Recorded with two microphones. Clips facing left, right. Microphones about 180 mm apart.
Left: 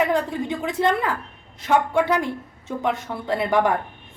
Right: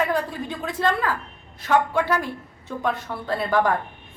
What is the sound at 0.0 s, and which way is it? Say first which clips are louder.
A woman's voice: left 3 dB; 20° left (ahead or behind).